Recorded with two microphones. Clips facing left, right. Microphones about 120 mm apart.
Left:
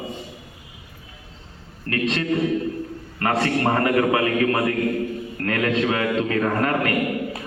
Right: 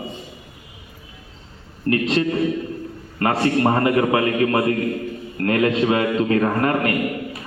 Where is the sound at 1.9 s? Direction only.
25° right (ahead or behind).